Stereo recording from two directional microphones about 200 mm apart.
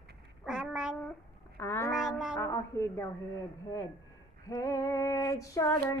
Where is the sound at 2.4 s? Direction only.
15° left (ahead or behind).